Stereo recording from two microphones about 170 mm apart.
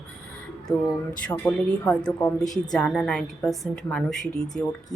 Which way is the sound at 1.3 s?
10° left (ahead or behind).